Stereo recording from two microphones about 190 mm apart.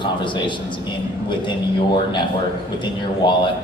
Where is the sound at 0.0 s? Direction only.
25° left (ahead or behind).